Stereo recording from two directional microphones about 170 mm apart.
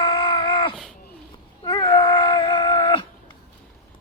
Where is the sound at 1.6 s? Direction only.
25° left (ahead or behind).